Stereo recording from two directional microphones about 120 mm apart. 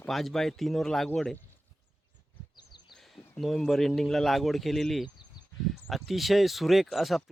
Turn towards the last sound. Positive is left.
turn(degrees=0)  # may be behind; listen again after turning